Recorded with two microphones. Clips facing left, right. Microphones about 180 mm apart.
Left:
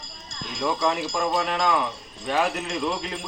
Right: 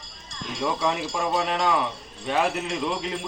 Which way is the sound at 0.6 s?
10° right (ahead or behind).